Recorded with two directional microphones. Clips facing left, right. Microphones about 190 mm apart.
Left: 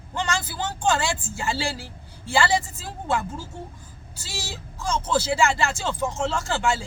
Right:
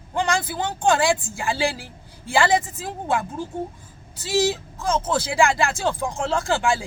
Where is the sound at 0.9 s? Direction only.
15° right (ahead or behind).